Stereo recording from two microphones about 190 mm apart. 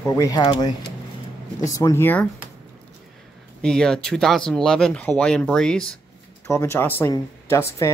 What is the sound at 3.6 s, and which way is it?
Speech, 5° left (ahead or behind).